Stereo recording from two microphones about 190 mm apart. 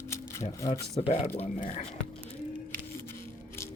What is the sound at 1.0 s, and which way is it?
Speech, 35° left (ahead or behind).